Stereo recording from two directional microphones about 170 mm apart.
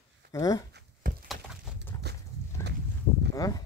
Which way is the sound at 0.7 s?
60° right (ahead or behind).